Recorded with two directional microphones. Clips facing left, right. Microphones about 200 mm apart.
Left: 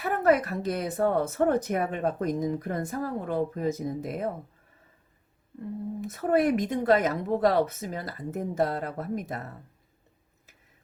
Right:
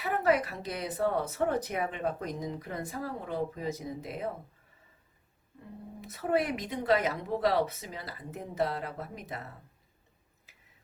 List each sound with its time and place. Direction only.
0.0 s speech: 50° left (ahead or behind)
6.0 s speech: 50° left (ahead or behind)